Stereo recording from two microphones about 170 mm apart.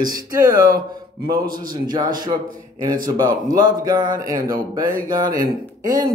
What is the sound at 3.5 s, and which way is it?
A man's voice, 25° right (ahead or behind).